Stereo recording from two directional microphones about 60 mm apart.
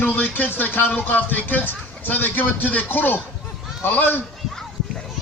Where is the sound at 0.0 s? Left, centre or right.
Left.